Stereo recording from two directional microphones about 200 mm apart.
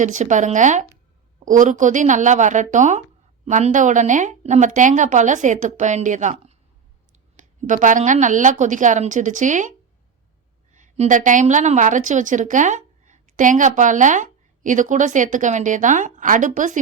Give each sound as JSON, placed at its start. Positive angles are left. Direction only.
{"t": 0.0, "sound": "a woman's voice", "side_deg": -40}
{"t": 7.7, "sound": "a woman's voice", "side_deg": -40}